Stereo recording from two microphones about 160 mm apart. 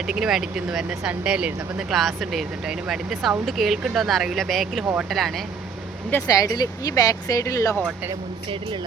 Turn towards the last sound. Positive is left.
turn(degrees=20)  # may be behind; listen again after turning